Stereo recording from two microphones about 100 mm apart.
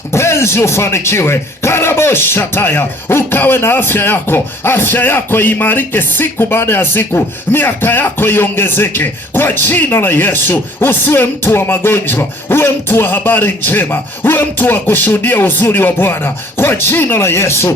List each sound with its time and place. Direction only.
0.1 s speech: 25° left (ahead or behind)